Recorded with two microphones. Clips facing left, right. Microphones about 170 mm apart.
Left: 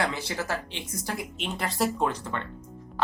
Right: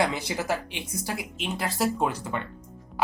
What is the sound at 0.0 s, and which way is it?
Speech, 15° right (ahead or behind).